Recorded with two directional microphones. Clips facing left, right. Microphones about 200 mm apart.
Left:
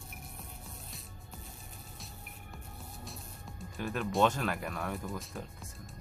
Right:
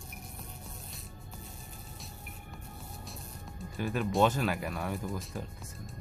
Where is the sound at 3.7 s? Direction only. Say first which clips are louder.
Right 2 dB; centre (ahead or behind).